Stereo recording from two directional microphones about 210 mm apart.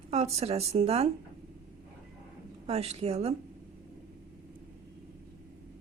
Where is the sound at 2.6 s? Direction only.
30° right (ahead or behind).